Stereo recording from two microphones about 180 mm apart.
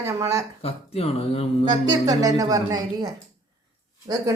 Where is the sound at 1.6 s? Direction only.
20° right (ahead or behind).